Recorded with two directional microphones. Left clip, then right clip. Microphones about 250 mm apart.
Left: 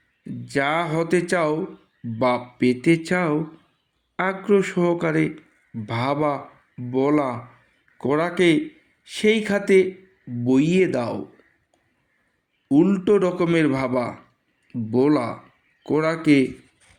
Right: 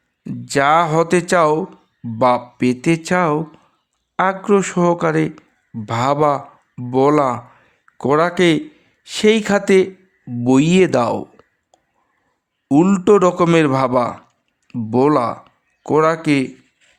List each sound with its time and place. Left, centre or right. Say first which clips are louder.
0.3 s a man's voice: right 8 dB; right
12.6 s a man's voice: right 5 dB; right